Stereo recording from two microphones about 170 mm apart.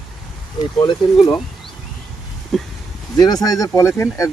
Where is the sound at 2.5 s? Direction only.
Centre (ahead or behind).